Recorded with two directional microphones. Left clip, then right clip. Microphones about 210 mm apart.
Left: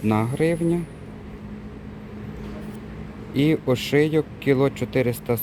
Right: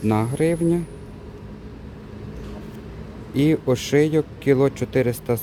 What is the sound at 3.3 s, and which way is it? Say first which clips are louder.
Speech: right 1 dB; 10° right (ahead or behind).